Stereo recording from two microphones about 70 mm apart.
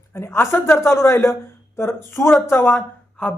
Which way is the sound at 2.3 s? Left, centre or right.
Left.